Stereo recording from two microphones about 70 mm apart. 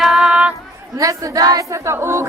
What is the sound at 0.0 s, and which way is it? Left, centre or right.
Female singing, centre.